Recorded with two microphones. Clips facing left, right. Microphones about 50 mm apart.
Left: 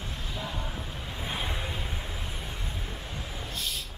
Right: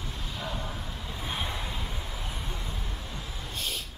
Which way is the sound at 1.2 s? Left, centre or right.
Centre.